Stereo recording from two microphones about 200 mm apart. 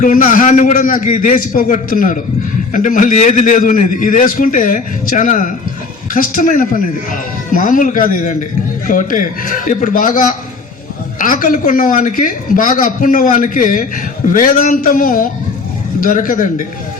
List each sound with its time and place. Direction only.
0.0 s a man's voice: 40° left (ahead or behind)